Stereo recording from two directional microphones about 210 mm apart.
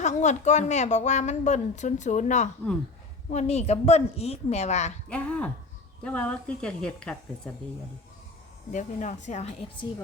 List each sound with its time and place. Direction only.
0.0 s a woman's voice: 35° left (ahead or behind)
5.0 s speech: 5° left (ahead or behind)
8.7 s a woman's voice: 35° left (ahead or behind)